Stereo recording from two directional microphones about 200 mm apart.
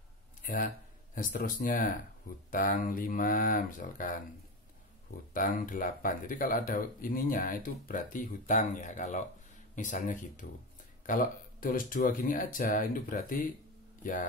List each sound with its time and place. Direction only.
0.4 s a sound: 45° left (ahead or behind)
1.1 s speech: 45° left (ahead or behind)
5.3 s speech: 40° left (ahead or behind)